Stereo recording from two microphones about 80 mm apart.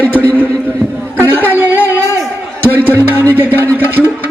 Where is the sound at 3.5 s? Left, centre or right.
Left.